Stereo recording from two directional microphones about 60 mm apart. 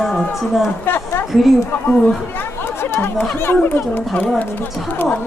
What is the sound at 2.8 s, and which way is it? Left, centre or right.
Chatter, left.